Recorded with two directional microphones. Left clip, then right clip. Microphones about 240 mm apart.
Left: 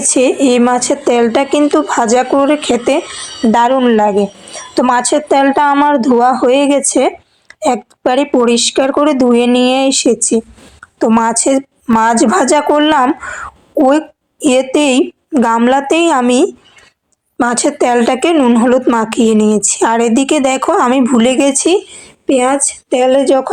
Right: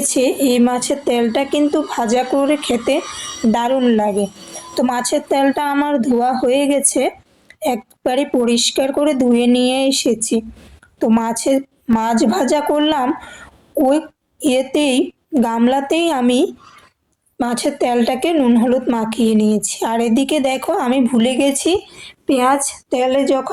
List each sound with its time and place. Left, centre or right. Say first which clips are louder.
0.0 s a woman's voice: left 5 dB; centre